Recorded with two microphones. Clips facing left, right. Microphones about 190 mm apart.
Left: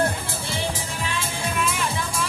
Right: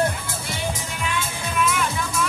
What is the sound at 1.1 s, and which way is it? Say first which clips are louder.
Music: right 1 dB; 30° left (ahead or behind).